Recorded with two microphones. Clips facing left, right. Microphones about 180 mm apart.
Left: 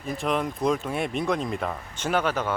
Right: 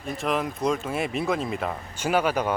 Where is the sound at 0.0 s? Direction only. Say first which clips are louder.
Even; centre (ahead or behind).